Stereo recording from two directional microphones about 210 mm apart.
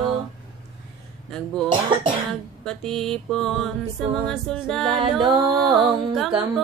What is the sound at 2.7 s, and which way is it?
Music, centre (ahead or behind).